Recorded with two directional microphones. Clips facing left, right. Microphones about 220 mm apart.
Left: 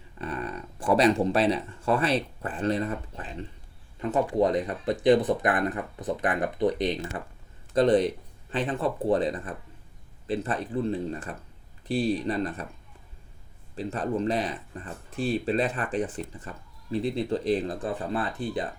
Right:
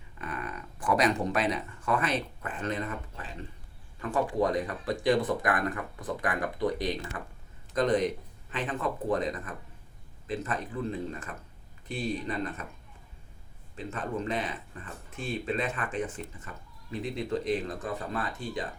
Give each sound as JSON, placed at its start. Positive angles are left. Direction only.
{"t": 0.2, "sound": "speech", "side_deg": 30}
{"t": 13.7, "sound": "speech", "side_deg": 35}